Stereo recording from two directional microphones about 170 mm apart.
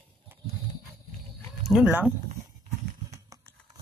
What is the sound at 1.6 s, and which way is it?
Speech, 5° right (ahead or behind).